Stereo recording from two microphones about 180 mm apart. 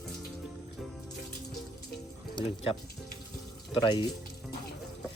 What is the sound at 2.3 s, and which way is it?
Speech, 30° left (ahead or behind).